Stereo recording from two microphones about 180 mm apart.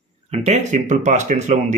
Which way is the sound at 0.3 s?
40° right (ahead or behind).